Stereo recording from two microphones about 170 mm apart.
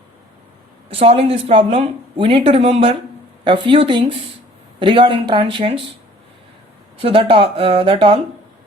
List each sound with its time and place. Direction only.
0.9 s speech: 35° right (ahead or behind)
7.0 s speech: 30° right (ahead or behind)